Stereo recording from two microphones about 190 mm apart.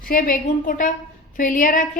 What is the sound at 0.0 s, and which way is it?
A woman's voice, 50° left (ahead or behind).